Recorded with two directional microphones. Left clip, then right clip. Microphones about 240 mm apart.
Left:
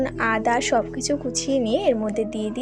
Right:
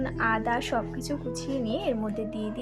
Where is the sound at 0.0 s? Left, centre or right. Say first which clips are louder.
Left 5 dB; left.